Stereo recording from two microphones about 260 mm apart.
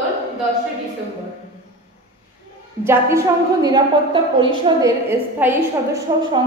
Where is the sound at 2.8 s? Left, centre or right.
Centre.